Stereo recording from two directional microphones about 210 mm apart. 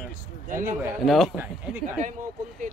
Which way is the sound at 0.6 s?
10° right (ahead or behind).